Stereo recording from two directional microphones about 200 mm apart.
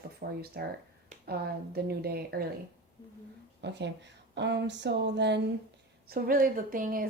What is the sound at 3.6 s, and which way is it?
Speech, 60° right (ahead or behind).